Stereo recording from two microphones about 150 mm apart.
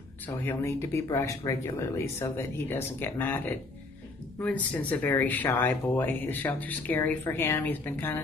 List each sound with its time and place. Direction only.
0.3 s speech: 20° left (ahead or behind)